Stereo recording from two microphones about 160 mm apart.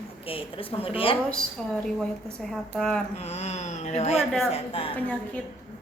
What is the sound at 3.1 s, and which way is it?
Speech, 40° left (ahead or behind).